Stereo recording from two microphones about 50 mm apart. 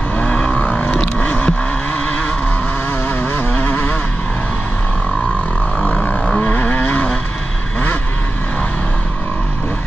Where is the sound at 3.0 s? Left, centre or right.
Left.